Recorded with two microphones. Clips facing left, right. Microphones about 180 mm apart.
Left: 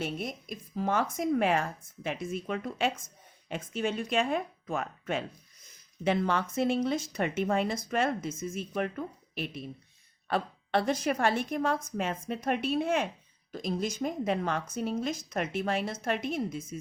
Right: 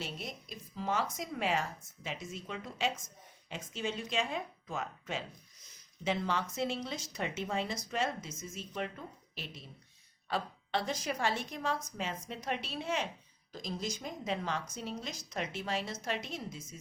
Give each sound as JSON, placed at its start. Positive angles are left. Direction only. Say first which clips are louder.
{"t": 0.0, "sound": "speech", "louder": "left 8 dB", "side_deg": 50}